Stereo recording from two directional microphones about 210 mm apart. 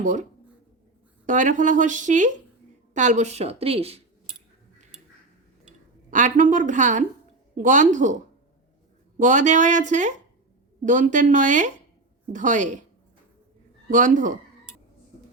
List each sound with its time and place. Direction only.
0.0 s speech: 35° right (ahead or behind)
1.3 s a woman's voice: 35° right (ahead or behind)
6.1 s speech: 35° right (ahead or behind)
13.9 s speech: 40° right (ahead or behind)